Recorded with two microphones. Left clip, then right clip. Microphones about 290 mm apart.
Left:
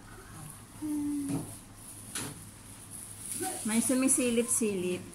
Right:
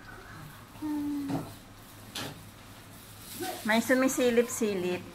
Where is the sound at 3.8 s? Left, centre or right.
Right.